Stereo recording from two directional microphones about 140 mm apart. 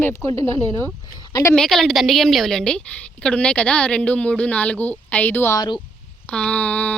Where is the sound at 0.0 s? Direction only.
20° left (ahead or behind).